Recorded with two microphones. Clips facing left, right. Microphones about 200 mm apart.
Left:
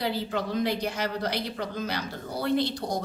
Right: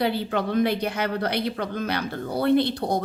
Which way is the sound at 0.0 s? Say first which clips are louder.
Right 5 dB; 60° right (ahead or behind).